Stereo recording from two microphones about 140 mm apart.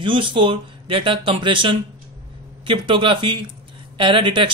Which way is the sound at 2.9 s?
35° right (ahead or behind).